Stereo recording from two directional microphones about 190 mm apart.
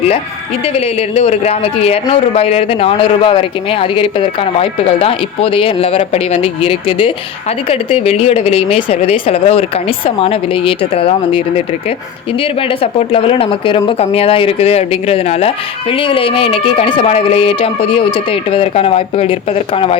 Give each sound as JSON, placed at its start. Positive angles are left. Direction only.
{"t": 0.6, "sound": "a woman's voice", "side_deg": 30}